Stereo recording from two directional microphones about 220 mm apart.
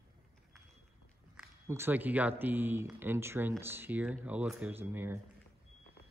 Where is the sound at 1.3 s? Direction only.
10° right (ahead or behind).